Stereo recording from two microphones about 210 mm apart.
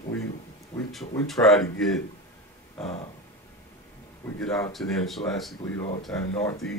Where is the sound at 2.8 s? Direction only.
5° left (ahead or behind).